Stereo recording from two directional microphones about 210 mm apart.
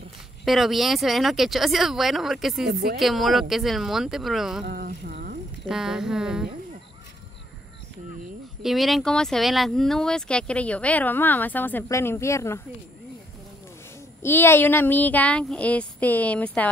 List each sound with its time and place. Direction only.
0.5 s speech: centre (ahead or behind)
2.7 s speech: 45° right (ahead or behind)
3.0 s speech: centre (ahead or behind)
4.6 s a sound: 45° right (ahead or behind)
5.7 s speech: 5° right (ahead or behind)
8.6 s speech: centre (ahead or behind)
14.2 s speech: 10° left (ahead or behind)